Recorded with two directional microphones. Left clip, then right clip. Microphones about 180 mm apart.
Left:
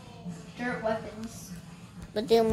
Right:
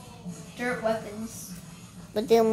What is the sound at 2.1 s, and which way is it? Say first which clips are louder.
Speech: right 2 dB; 20° right (ahead or behind).